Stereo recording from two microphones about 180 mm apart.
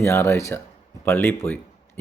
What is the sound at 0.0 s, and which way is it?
Speech, 15° left (ahead or behind).